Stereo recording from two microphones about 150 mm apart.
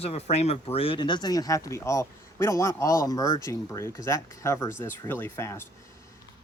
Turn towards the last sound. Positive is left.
turn(degrees=15)  # may be behind; listen again after turning